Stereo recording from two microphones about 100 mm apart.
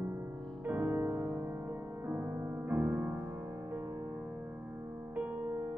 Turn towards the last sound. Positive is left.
turn(degrees=-25)  # may be behind; listen again after turning